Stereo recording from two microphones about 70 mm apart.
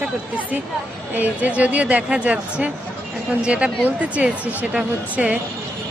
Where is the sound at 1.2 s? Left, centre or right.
Right.